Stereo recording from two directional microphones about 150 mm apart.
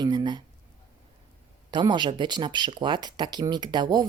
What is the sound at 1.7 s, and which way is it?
Speech, 30° right (ahead or behind).